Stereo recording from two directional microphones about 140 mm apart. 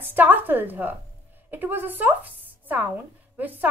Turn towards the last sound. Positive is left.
turn(degrees=-15)  # may be behind; listen again after turning